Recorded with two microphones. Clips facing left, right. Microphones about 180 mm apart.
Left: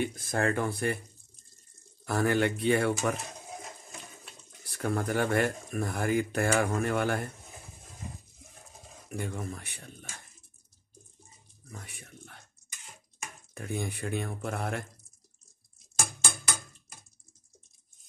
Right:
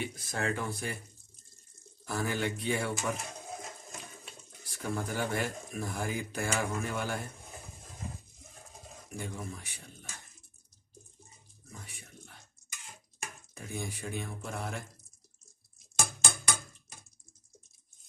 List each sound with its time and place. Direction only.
0.0 s speech: 50° left (ahead or behind)
2.0 s speech: 60° left (ahead or behind)
4.6 s speech: 60° left (ahead or behind)
9.1 s speech: 60° left (ahead or behind)
13.6 s speech: 60° left (ahead or behind)